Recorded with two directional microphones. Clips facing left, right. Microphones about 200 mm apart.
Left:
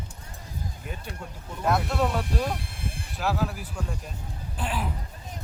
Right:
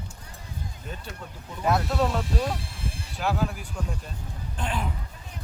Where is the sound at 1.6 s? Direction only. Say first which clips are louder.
Right 1 dB; centre (ahead or behind).